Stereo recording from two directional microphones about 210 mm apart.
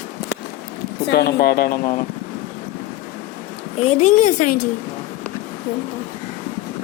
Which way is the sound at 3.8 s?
30° left (ahead or behind).